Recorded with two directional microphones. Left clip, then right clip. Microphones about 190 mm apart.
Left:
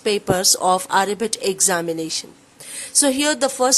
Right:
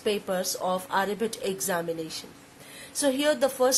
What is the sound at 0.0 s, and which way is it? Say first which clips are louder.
A woman's voice: left 9 dB; 40° left (ahead or behind).